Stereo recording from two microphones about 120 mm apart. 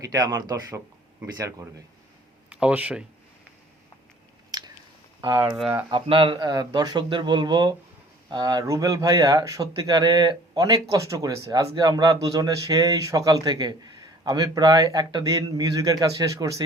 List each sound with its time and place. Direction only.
0.0 s a man's voice: 30° right (ahead or behind)
2.5 s speech: 10° right (ahead or behind)
4.5 s biting: 35° right (ahead or behind)
5.9 s speech: 45° right (ahead or behind); by 16.6 s 30° right (ahead or behind)